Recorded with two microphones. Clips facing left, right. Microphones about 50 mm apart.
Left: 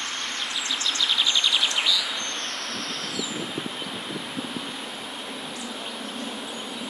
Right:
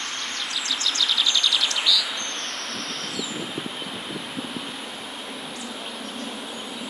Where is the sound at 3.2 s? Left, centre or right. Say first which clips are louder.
Even; centre.